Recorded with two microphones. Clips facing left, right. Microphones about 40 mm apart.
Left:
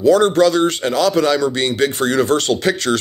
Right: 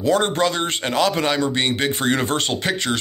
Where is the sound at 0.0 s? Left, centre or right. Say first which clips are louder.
Left 7 dB; right.